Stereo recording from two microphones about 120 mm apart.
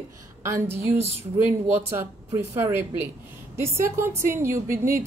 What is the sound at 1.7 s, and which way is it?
A woman's voice, 20° right (ahead or behind).